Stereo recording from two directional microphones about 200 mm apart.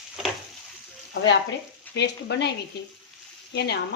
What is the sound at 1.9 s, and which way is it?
Speech, 60° left (ahead or behind).